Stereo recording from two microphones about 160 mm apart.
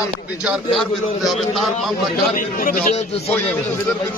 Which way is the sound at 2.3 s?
55° left (ahead or behind).